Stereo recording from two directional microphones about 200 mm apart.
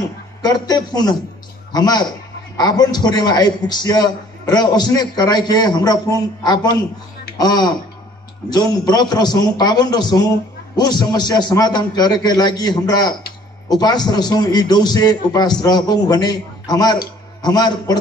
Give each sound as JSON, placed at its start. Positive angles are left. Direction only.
{"t": 0.4, "sound": "a man's voice", "side_deg": 20}